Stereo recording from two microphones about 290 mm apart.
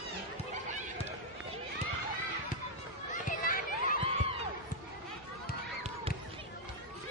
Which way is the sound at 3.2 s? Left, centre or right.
Left.